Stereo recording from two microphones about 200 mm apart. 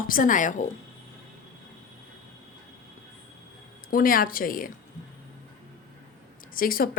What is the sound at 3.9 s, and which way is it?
Speech, 45° left (ahead or behind).